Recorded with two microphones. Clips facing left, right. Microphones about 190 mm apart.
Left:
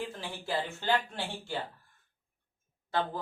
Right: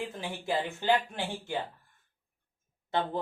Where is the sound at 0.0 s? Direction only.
15° right (ahead or behind).